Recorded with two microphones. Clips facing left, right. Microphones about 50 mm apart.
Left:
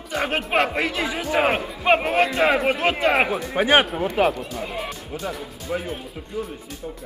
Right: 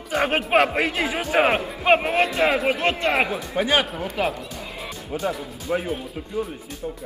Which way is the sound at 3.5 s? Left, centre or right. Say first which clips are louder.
Left 4 dB; left.